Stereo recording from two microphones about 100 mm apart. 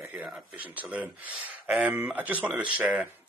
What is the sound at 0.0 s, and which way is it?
Speech, 10° right (ahead or behind).